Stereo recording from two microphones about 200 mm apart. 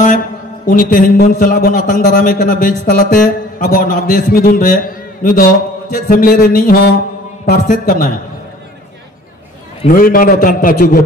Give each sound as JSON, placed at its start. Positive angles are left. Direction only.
{"t": 0.7, "sound": "a man's voice", "side_deg": 45}
{"t": 9.8, "sound": "a man's voice", "side_deg": 45}